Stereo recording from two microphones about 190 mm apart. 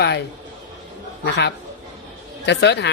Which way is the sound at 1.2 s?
65° left (ahead or behind).